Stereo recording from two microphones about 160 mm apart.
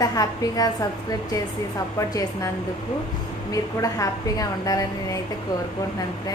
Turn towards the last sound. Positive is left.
turn(degrees=20)  # may be behind; listen again after turning